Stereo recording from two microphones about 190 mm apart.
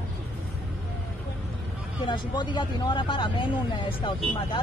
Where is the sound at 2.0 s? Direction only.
25° left (ahead or behind).